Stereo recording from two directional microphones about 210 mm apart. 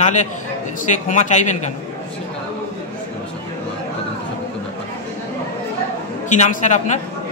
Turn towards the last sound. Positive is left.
turn(degrees=35)  # may be behind; listen again after turning